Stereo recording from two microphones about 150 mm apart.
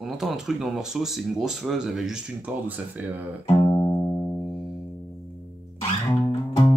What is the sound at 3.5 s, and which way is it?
Music, 25° left (ahead or behind).